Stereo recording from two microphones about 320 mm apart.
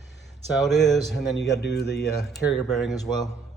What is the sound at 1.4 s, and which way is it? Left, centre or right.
Speech, left.